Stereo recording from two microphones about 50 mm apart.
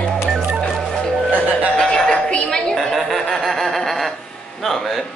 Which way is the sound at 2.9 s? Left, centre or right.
Centre.